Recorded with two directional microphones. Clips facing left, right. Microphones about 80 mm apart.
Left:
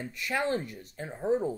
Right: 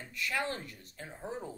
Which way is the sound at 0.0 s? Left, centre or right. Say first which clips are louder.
Left 5 dB; left.